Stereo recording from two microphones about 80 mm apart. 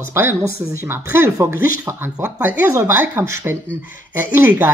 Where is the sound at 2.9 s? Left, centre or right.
Right.